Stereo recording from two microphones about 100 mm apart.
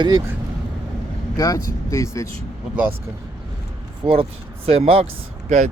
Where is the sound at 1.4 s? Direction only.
35° left (ahead or behind).